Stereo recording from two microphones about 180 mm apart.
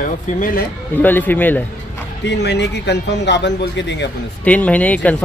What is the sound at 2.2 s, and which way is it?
Speech, 70° left (ahead or behind).